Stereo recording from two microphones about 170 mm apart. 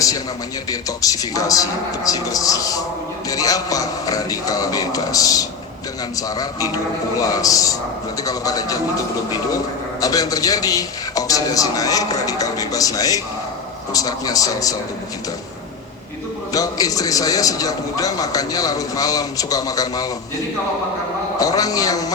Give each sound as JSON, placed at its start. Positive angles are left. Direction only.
{"t": 0.7, "sound": "a man's voice", "side_deg": 20}
{"t": 10.0, "sound": "a man's voice", "side_deg": 20}
{"t": 16.5, "sound": "a man's voice", "side_deg": 20}
{"t": 21.3, "sound": "a man's voice", "side_deg": 20}